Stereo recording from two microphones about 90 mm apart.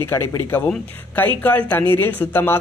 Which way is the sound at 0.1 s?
25° left (ahead or behind).